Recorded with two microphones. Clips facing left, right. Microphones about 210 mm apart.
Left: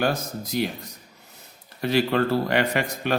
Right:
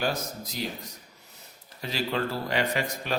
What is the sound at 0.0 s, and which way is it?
Speech, 60° left (ahead or behind).